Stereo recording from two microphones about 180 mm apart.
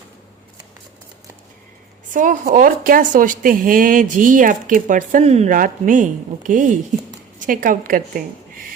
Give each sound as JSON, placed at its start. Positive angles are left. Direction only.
{"t": 2.1, "sound": "speech", "side_deg": -45}